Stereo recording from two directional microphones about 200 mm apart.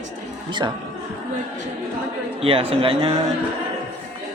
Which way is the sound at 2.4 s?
30° right (ahead or behind).